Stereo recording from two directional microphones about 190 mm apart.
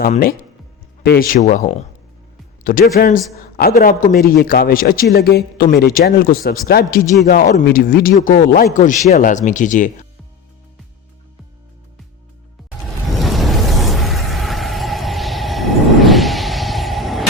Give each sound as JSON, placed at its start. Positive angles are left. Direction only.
{"t": 0.0, "sound": "a man's voice", "side_deg": 50}
{"t": 13.1, "sound": "music", "side_deg": 0}